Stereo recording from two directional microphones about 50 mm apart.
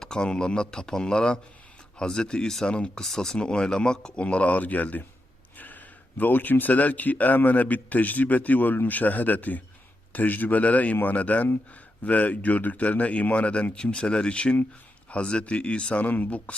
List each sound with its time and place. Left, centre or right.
0.0 s a man's voice: centre
3.0 s a man's voice: centre; by 5.0 s left
6.1 s a man's voice: left
16.0 s a man's voice: left